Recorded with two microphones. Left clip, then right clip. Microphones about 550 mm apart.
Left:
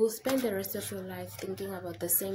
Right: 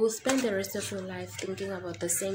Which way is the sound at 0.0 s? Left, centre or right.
Left.